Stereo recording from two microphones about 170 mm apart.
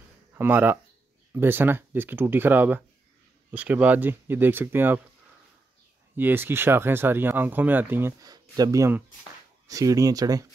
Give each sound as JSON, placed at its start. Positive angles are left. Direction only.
{"t": 0.3, "sound": "speech", "side_deg": -10}
{"t": 6.1, "sound": "speech", "side_deg": -10}